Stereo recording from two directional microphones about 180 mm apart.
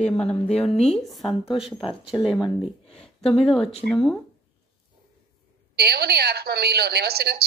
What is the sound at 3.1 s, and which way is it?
Speech, centre (ahead or behind).